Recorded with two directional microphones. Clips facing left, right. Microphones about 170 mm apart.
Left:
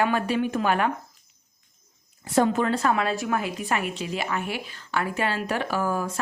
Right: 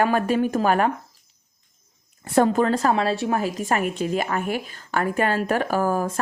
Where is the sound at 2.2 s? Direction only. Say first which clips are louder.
Right 3 dB; 50° right (ahead or behind).